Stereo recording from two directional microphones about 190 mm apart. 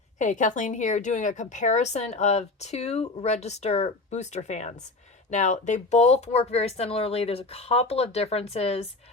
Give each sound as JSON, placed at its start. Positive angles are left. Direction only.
{"t": 0.2, "sound": "a woman's voice", "side_deg": 40}